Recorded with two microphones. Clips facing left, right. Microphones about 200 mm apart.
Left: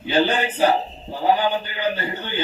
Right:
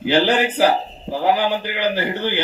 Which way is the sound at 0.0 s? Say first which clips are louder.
Right 3 dB; 85° right.